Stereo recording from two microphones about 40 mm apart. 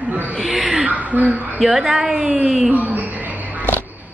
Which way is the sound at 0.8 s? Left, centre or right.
Right.